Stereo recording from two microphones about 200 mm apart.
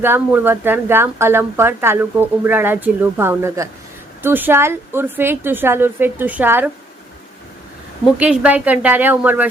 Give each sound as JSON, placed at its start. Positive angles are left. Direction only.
{"t": 0.0, "sound": "speech", "side_deg": -10}
{"t": 8.2, "sound": "speech", "side_deg": -5}